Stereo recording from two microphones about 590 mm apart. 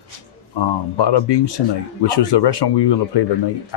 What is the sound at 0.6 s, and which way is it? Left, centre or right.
Speech, left.